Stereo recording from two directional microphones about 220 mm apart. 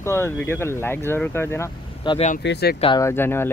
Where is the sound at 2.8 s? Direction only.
20° left (ahead or behind).